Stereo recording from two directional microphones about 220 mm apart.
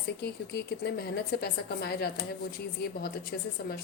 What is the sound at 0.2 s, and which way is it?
A woman's voice, 45° left (ahead or behind).